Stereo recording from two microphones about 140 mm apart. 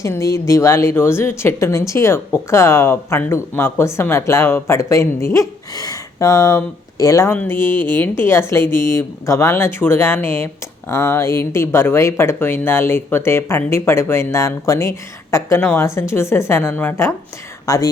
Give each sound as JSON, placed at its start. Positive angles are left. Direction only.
{"t": 0.0, "sound": "speech", "side_deg": 20}